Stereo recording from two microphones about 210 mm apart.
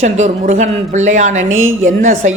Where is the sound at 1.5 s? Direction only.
70° right (ahead or behind).